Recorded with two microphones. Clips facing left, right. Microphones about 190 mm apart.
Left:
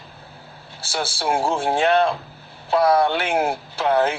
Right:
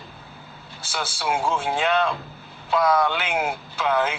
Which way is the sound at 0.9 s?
35° left (ahead or behind).